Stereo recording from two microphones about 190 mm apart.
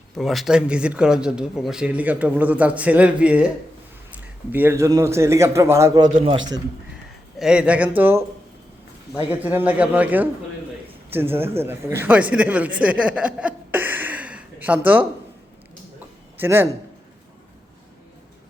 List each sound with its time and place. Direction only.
0.2 s speech: centre (ahead or behind)
4.5 s a man's voice: 15° right (ahead or behind)
6.2 s a man's voice: 30° right (ahead or behind)
7.3 s a man's voice: 5° right (ahead or behind)
9.4 s a man's voice: 10° right (ahead or behind)
16.4 s a man's voice: 10° right (ahead or behind)